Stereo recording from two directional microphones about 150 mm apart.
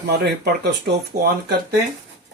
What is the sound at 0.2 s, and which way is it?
Speech, 90° right.